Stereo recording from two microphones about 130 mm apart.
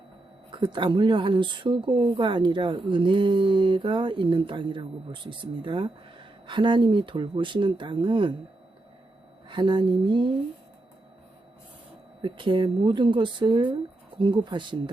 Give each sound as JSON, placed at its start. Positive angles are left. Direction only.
{"t": 0.5, "sound": "speech", "side_deg": -40}
{"t": 9.5, "sound": "speech", "side_deg": -40}
{"t": 12.2, "sound": "speech", "side_deg": -40}